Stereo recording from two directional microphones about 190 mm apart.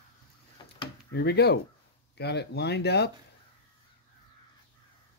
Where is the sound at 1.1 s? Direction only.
60° left (ahead or behind).